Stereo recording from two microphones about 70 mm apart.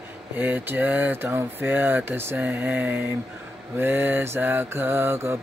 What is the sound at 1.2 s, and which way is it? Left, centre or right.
Mantra, right.